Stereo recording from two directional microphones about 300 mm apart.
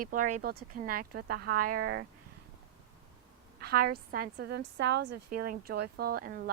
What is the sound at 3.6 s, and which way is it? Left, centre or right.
A woman's voice, right.